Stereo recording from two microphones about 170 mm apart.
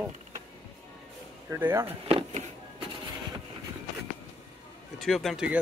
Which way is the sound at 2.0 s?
35° right (ahead or behind).